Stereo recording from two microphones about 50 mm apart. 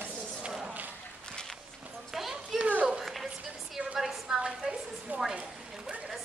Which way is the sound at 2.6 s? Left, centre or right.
Right.